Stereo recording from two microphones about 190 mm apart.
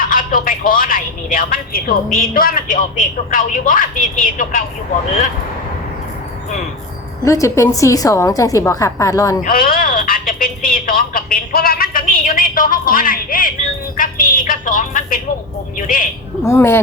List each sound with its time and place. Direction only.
0.1 s speech: 45° left (ahead or behind)
7.3 s a woman's voice: 15° left (ahead or behind)
9.4 s speech: 50° left (ahead or behind)
16.4 s a woman's voice: 15° left (ahead or behind)